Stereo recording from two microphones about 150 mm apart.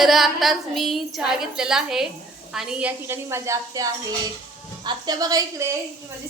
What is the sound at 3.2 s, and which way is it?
A woman's voice, 20° right (ahead or behind).